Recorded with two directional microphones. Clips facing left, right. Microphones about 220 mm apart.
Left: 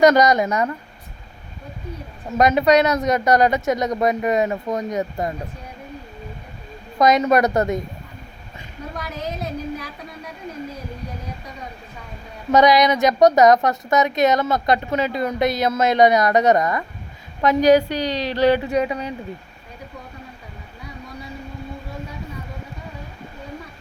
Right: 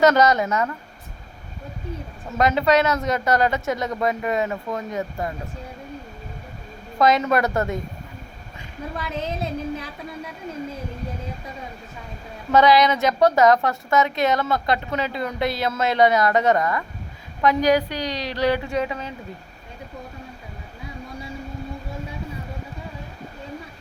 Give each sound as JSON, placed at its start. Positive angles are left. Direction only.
{"t": 0.0, "sound": "a woman's voice", "side_deg": 15}
{"t": 2.4, "sound": "a woman's voice", "side_deg": 15}
{"t": 7.0, "sound": "a woman's voice", "side_deg": 15}
{"t": 9.0, "sound": "a woman's voice", "side_deg": -25}
{"t": 12.5, "sound": "a woman's voice", "side_deg": 15}